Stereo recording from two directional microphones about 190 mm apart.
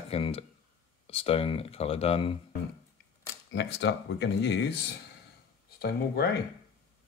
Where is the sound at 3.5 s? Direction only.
65° left (ahead or behind).